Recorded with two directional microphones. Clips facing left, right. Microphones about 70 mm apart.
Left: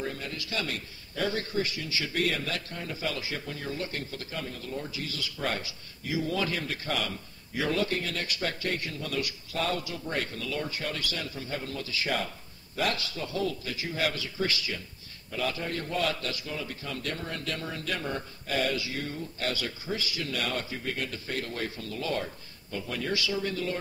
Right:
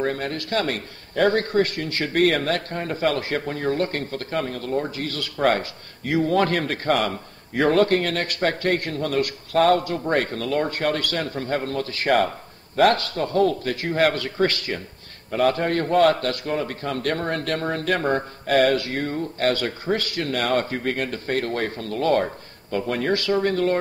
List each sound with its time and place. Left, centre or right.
0.0 s a man's voice: right